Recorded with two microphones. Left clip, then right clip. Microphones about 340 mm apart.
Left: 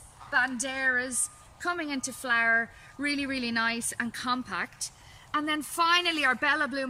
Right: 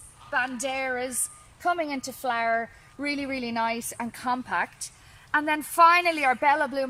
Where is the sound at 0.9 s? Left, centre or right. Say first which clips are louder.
Left 2 dB; centre.